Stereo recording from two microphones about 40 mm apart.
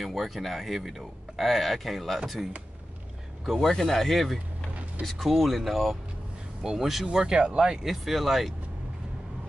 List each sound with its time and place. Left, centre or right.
0.0 s speech: centre
3.4 s speech: centre
7.1 s speech: centre
7.9 s speech: centre